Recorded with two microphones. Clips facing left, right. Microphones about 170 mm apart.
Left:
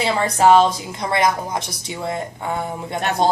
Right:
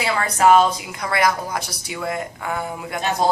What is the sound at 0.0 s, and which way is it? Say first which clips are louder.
A woman's voice: left 2 dB; 25° left (ahead or behind).